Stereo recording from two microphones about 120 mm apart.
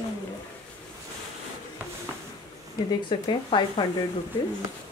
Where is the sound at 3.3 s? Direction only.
45° left (ahead or behind).